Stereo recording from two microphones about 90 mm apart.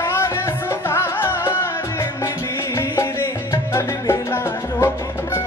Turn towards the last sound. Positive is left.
turn(degrees=25)  # may be behind; listen again after turning